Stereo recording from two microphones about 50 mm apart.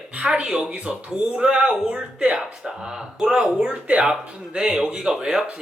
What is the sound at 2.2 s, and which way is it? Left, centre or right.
Speech, right.